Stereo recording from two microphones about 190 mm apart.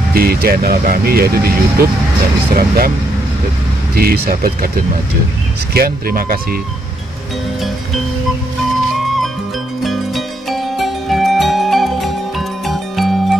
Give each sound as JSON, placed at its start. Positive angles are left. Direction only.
{"t": 0.1, "sound": "speech", "side_deg": -55}
{"t": 3.9, "sound": "speech", "side_deg": -55}
{"t": 5.8, "sound": "speech", "side_deg": -50}
{"t": 9.8, "sound": "music", "side_deg": 0}